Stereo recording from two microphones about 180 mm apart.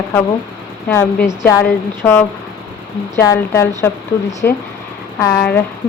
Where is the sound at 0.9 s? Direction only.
10° left (ahead or behind).